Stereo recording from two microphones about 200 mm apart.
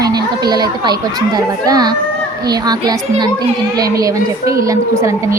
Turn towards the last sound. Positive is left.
turn(degrees=-15)  # may be behind; listen again after turning